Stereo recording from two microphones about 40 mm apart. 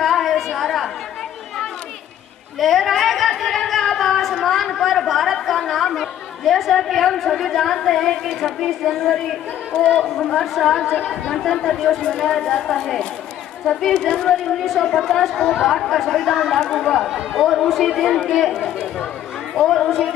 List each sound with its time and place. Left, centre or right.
0.0 s a sound: centre
0.6 s chatter: centre
2.6 s a sound: centre
8.6 s a woman's voice: centre
9.7 s speech: left
10.4 s a woman's voice: centre
14.6 s a woman's voice: centre
18.5 s chatter: centre